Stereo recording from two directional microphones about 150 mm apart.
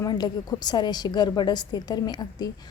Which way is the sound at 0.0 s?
30° left (ahead or behind).